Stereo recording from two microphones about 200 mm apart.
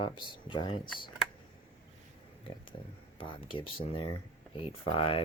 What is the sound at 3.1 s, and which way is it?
Speech, 25° left (ahead or behind).